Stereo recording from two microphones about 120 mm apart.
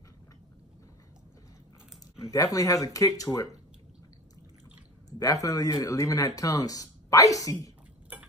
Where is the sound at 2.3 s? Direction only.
30° left (ahead or behind).